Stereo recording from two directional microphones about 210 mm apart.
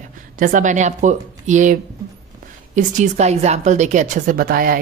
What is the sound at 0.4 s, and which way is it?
A woman's voice, 40° right (ahead or behind).